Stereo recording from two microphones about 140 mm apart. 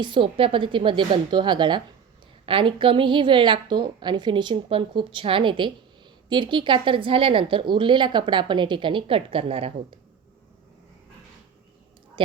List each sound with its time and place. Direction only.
0.0 s a woman's voice: 35° right (ahead or behind)